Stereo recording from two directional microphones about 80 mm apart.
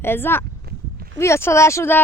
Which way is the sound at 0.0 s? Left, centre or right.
Left.